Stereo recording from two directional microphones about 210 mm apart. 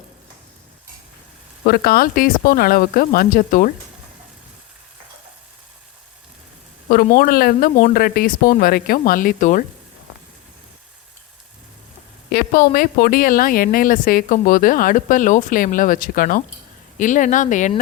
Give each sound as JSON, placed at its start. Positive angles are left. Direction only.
{"t": 1.6, "sound": "speech", "side_deg": 45}
{"t": 6.9, "sound": "speech", "side_deg": 45}
{"t": 12.3, "sound": "a woman's voice", "side_deg": 45}